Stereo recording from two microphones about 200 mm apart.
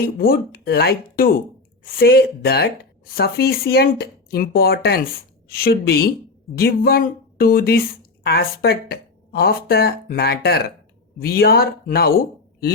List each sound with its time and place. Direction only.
0.2 s speech: 50° left (ahead or behind)